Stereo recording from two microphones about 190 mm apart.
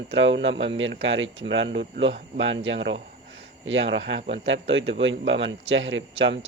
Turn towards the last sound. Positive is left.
turn(degrees=-80)